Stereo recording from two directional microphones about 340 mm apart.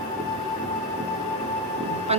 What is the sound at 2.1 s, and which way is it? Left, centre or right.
Speech, centre.